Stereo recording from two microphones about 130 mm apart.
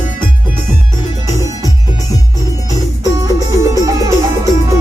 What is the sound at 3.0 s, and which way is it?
Music, 25° right (ahead or behind).